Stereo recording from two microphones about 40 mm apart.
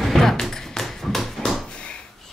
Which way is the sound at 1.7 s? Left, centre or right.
Left.